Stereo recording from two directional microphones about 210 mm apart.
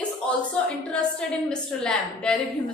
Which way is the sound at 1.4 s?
5° left (ahead or behind).